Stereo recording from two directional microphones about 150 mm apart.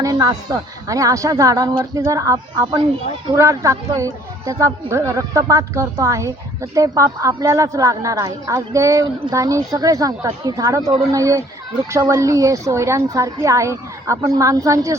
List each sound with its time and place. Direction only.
0.0 s a woman's voice: 25° right (ahead or behind)